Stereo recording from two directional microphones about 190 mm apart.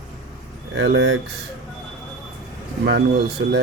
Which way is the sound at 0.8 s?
80° right.